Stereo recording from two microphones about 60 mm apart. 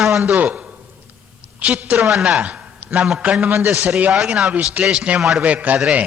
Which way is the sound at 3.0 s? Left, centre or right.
Centre.